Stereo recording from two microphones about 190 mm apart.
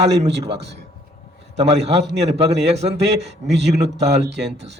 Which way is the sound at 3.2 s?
65° right (ahead or behind).